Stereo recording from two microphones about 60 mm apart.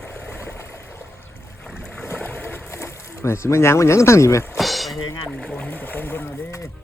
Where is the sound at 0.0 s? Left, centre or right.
Left.